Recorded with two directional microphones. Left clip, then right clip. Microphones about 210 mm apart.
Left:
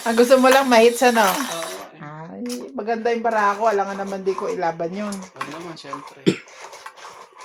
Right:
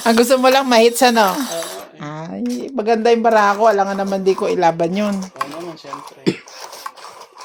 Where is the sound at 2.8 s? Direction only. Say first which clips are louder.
Right 8 dB; 60° right (ahead or behind).